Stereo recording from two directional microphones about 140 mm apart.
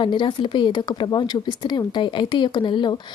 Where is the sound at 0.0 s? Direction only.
35° left (ahead or behind).